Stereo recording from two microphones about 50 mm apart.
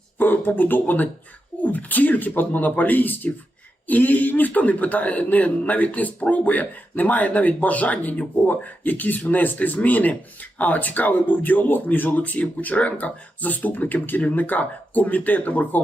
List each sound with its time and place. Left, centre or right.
0.2 s a man's voice: left